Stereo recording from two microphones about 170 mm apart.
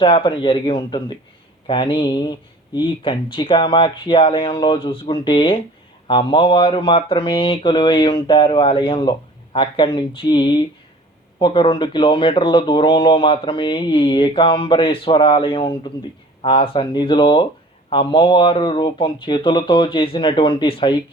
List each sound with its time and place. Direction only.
0.0 s speech: 30° left (ahead or behind)